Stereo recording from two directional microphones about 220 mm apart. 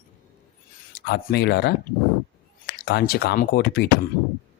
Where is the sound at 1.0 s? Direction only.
50° left (ahead or behind).